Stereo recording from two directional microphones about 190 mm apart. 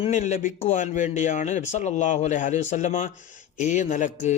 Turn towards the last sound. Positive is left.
turn(degrees=40)  # may be behind; listen again after turning